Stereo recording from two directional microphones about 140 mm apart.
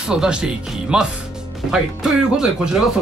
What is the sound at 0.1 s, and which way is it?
Speech, 5° right (ahead or behind).